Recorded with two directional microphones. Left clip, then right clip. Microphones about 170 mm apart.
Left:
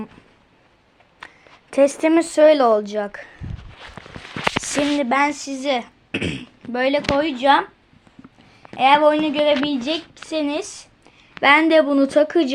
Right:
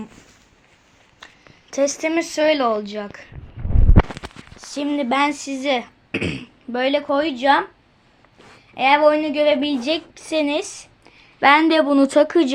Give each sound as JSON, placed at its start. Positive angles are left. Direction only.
{"t": 1.7, "sound": "speech", "side_deg": 40}
{"t": 4.9, "sound": "speech", "side_deg": 0}
{"t": 8.7, "sound": "a woman's voice", "side_deg": 20}
{"t": 9.8, "sound": "a woman's voice", "side_deg": -5}